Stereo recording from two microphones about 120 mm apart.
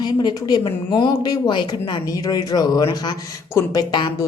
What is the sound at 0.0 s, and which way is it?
Speech, 35° left (ahead or behind).